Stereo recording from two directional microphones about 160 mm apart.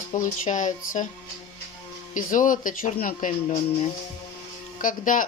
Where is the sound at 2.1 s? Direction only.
55° left (ahead or behind).